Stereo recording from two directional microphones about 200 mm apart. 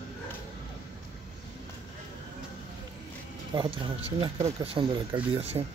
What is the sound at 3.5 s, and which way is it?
Speech, 20° right (ahead or behind).